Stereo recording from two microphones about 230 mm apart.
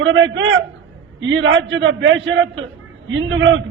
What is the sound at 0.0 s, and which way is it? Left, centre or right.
A man's voice, right.